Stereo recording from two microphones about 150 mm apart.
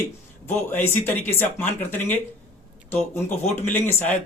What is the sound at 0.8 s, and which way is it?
A man's voice, 15° left (ahead or behind).